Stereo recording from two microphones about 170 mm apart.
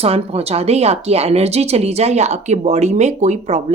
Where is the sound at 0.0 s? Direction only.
35° right (ahead or behind).